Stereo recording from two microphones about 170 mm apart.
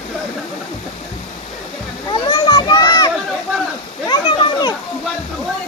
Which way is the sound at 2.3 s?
25° left (ahead or behind).